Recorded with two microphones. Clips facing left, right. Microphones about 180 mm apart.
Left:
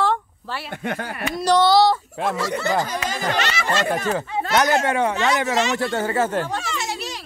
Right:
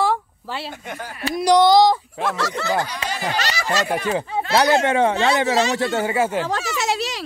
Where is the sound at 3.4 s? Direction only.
40° right (ahead or behind).